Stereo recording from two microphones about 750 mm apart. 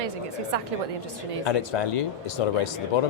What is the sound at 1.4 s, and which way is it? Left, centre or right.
Speech, left.